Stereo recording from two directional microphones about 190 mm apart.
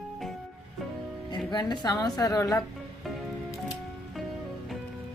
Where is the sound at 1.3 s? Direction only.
20° left (ahead or behind).